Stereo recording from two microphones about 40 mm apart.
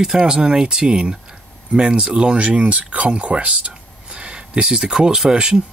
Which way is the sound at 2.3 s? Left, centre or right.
Right.